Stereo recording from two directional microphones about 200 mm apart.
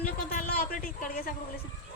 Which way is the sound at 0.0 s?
45° left (ahead or behind).